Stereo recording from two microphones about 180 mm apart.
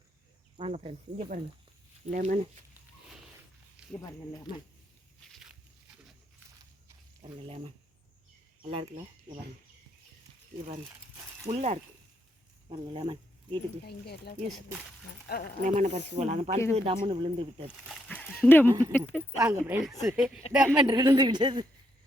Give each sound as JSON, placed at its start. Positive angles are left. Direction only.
{"t": 0.5, "sound": "speech", "side_deg": -35}
{"t": 2.0, "sound": "speech", "side_deg": -45}
{"t": 3.8, "sound": "a sound", "side_deg": -5}
{"t": 4.5, "sound": "speech", "side_deg": 25}
{"t": 7.3, "sound": "speech", "side_deg": -30}
{"t": 11.4, "sound": "speech", "side_deg": -40}
{"t": 12.6, "sound": "speech", "side_deg": -30}
{"t": 13.8, "sound": "speech", "side_deg": 60}
{"t": 15.6, "sound": "speech", "side_deg": -40}
{"t": 18.1, "sound": "dog", "side_deg": 10}
{"t": 18.9, "sound": "speech", "side_deg": 5}
{"t": 19.4, "sound": "speech", "side_deg": -15}
{"t": 20.8, "sound": "speech", "side_deg": -20}